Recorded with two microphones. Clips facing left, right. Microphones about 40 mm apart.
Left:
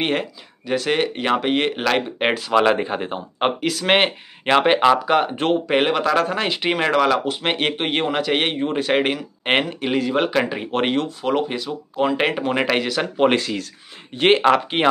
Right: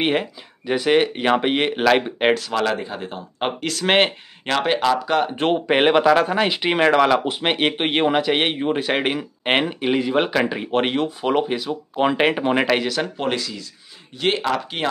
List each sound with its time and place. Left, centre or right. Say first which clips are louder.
0.0 s speech: right 1 dB; centre
2.1 s speech: right 2 dB; centre
2.5 s speech: left 5 dB; left
3.3 s speech: left 3 dB; centre
4.5 s speech: left 4 dB; left
5.4 s speech: right 1 dB; centre
6.0 s speech: right 3 dB; centre
11.1 s speech: right 1 dB; centre
11.9 s speech: right 1 dB; right
12.2 s speech: right 2 dB; centre
12.6 s speech: even; centre
13.4 s speech: left 5 dB; left
14.1 s speech: left 6 dB; left